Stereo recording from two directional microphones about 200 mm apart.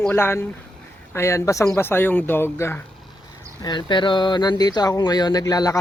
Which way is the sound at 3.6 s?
20° left (ahead or behind).